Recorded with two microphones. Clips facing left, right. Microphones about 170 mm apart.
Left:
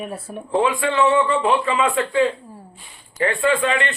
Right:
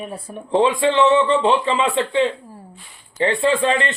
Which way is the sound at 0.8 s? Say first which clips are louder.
Right 3 dB; 20° right (ahead or behind).